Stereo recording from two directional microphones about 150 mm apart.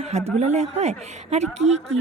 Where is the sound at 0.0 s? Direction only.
45° right (ahead or behind).